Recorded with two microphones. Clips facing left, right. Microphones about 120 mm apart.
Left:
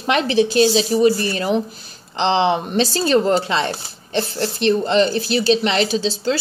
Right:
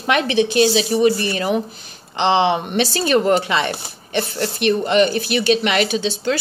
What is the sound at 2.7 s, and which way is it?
Speech, 30° left (ahead or behind).